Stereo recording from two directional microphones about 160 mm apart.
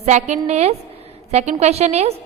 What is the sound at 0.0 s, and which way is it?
A woman's voice, 45° right (ahead or behind).